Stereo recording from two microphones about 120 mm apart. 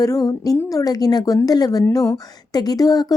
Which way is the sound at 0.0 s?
30° left (ahead or behind).